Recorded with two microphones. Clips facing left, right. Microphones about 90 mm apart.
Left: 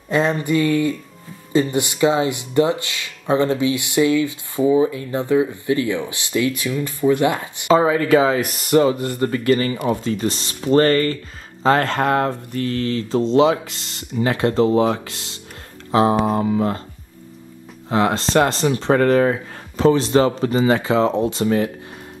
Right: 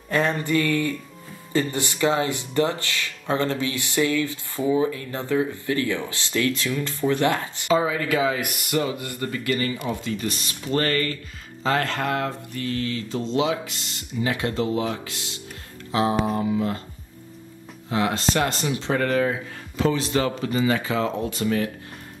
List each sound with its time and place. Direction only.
0.1 s a sound: 20° left (ahead or behind)
1.5 s speech: 20° left (ahead or behind)
7.6 s speech: 45° left (ahead or behind)
17.8 s speech: 40° left (ahead or behind)